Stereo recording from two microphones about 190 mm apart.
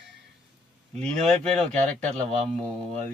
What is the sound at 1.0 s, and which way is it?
Speech, 5° left (ahead or behind).